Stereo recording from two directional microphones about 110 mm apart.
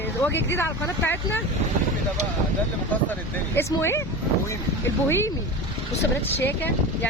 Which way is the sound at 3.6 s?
25° left (ahead or behind).